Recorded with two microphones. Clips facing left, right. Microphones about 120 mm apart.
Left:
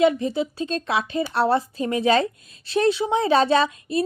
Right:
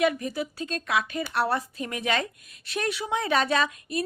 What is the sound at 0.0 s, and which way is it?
A woman's voice, 25° left (ahead or behind).